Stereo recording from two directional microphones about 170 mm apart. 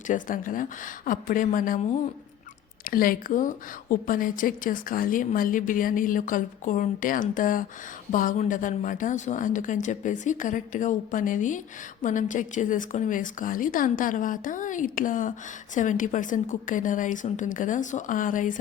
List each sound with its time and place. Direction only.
0.1 s a woman's voice: 50° left (ahead or behind)
2.8 s a woman's voice: 55° left (ahead or behind)